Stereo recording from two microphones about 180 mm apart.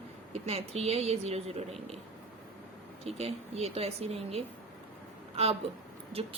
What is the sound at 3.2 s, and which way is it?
A woman's voice, 35° right (ahead or behind).